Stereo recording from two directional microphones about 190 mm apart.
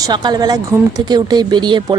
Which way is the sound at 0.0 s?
20° right (ahead or behind).